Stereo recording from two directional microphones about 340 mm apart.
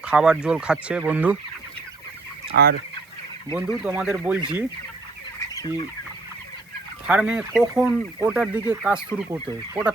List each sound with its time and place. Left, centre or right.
0.0 s speech: centre
2.5 s fowl: right
3.8 s speech: centre
5.4 s chicken: centre
7.1 s speech: centre